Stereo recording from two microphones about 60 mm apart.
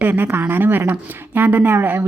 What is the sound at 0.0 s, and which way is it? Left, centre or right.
Speech, right.